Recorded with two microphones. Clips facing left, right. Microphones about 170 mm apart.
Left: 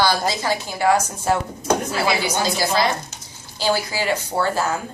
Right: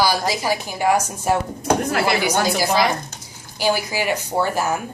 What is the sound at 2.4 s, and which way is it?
Speech, 15° right (ahead or behind).